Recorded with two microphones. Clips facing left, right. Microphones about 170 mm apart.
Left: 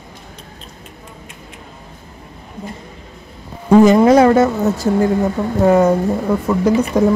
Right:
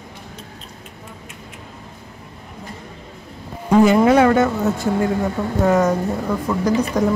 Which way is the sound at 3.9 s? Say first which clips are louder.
Left 4 dB; 40° left (ahead or behind).